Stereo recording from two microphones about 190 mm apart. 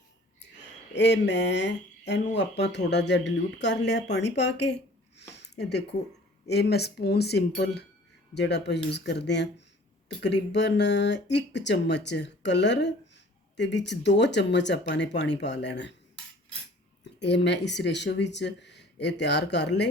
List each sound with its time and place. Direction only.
0.9 s speech: 65° left (ahead or behind)
17.2 s speech: 65° left (ahead or behind)